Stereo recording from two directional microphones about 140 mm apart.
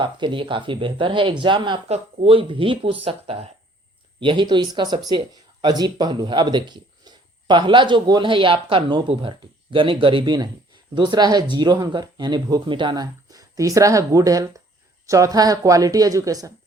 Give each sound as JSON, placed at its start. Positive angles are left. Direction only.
{"t": 0.0, "sound": "speech", "side_deg": -35}